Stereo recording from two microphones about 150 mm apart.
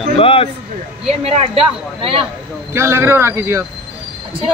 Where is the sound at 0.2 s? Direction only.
40° left (ahead or behind).